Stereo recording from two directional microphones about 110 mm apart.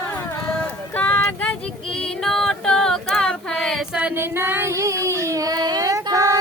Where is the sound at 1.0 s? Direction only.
15° left (ahead or behind).